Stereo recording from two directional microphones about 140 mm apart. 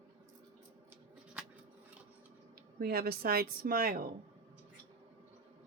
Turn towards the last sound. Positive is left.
turn(degrees=-90)